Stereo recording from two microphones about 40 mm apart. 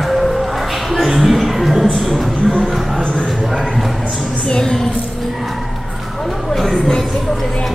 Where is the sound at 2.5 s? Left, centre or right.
Centre.